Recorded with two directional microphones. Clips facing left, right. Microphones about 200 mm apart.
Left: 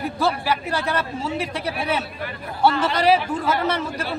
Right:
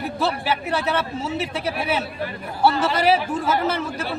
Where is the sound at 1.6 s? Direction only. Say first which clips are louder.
Right 1 dB; 5° right (ahead or behind).